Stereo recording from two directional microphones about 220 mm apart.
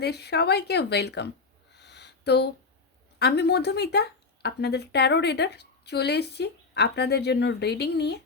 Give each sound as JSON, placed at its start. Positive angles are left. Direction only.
{"t": 0.0, "sound": "speech", "side_deg": 50}
{"t": 1.7, "sound": "a sound", "side_deg": 50}
{"t": 3.2, "sound": "speech", "side_deg": 50}